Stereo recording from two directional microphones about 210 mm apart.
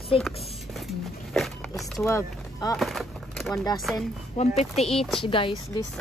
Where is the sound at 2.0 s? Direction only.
15° left (ahead or behind).